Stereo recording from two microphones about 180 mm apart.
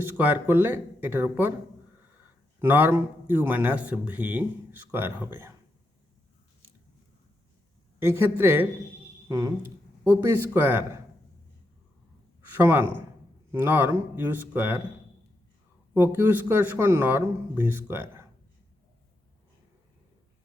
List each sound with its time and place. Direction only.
0.0 s speech: 10° right (ahead or behind)
2.6 s speech: 10° right (ahead or behind)
7.9 s speech: 15° right (ahead or behind)
12.5 s speech: 10° right (ahead or behind)
16.0 s speech: 10° right (ahead or behind)